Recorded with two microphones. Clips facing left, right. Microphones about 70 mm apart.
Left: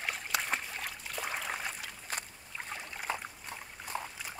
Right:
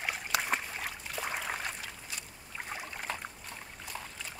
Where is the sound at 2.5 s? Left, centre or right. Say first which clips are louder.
Right 1 dB; centre.